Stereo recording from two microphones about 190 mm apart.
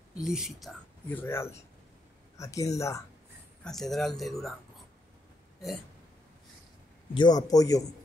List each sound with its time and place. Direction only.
0.2 s speech: centre (ahead or behind)
1.2 s speech: 15° left (ahead or behind)
3.6 s speech: centre (ahead or behind)
7.2 s speech: 20° left (ahead or behind)